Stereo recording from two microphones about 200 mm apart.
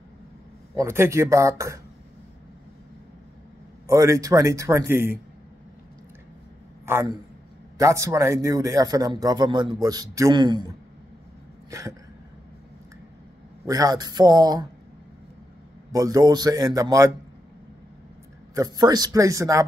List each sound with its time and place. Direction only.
0.7 s a man's voice: 15° right (ahead or behind)
3.8 s a man's voice: 15° right (ahead or behind)
6.9 s a man's voice: 10° right (ahead or behind)
11.7 s a man's voice: 15° right (ahead or behind)
13.7 s a man's voice: 20° right (ahead or behind)
15.9 s a man's voice: 15° right (ahead or behind)
18.5 s a man's voice: 20° right (ahead or behind)